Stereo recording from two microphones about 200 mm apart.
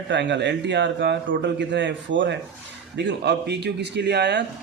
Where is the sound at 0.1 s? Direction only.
60° right (ahead or behind).